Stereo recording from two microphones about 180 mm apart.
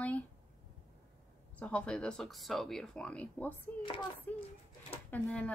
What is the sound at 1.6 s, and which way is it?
Speech, 5° left (ahead or behind).